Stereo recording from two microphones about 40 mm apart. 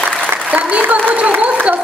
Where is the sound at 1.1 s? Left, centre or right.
Right.